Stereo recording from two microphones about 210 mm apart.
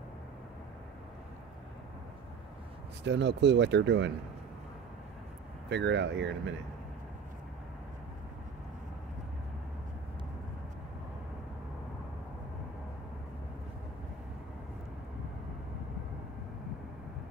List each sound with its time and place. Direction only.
3.0 s speech: 60° right (ahead or behind)
5.7 s speech: 55° right (ahead or behind)